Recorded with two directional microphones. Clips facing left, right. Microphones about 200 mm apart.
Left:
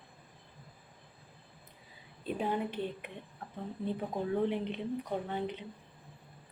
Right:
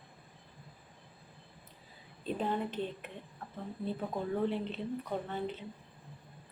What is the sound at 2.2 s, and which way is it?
Speech, 10° left (ahead or behind).